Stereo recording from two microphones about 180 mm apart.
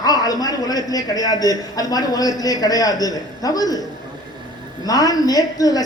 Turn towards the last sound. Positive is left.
turn(degrees=20)  # may be behind; listen again after turning